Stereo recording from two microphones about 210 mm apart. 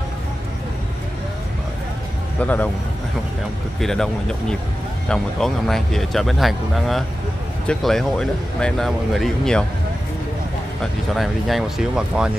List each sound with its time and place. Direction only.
2.4 s speech: 10° left (ahead or behind)
3.8 s speech: 5° left (ahead or behind)
10.8 s speech: centre (ahead or behind)